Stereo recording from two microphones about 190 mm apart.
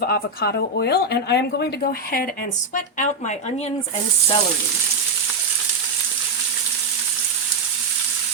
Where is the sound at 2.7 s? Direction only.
40° left (ahead or behind).